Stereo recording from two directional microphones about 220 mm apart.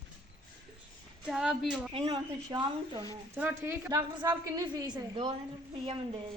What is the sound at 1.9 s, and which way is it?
A woman's voice, 20° right (ahead or behind).